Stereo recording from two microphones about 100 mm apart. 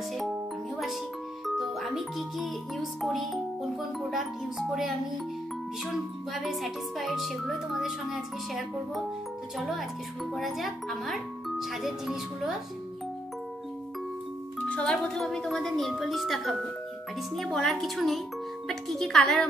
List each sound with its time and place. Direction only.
1.4 s speech: centre (ahead or behind)
6.3 s speech: centre (ahead or behind)
14.6 s speech: 10° left (ahead or behind)